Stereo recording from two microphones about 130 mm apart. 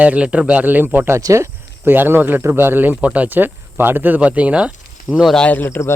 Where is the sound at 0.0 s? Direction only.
10° right (ahead or behind).